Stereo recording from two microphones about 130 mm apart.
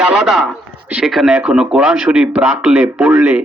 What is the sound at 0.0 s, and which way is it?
A man's voice, 5° right (ahead or behind).